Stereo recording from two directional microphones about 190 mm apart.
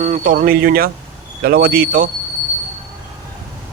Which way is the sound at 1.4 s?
55° right (ahead or behind).